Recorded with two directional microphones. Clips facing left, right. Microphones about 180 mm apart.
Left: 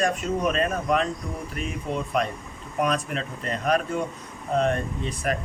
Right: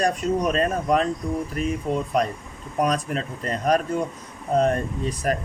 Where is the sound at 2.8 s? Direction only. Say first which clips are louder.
Right 2 dB; 35° right (ahead or behind).